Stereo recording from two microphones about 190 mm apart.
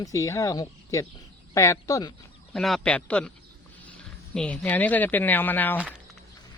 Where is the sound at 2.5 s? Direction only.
Centre (ahead or behind).